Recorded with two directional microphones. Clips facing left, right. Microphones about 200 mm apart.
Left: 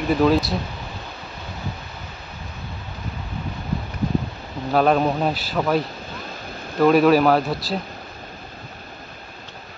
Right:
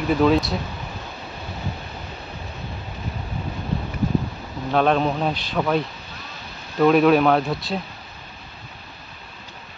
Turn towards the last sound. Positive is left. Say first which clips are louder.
# left 1 dB
turn(degrees=0)  # may be behind; listen again after turning